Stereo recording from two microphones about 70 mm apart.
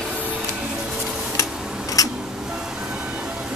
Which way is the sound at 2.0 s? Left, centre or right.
Left.